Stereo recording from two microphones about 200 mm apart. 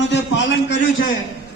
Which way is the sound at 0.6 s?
45° left (ahead or behind).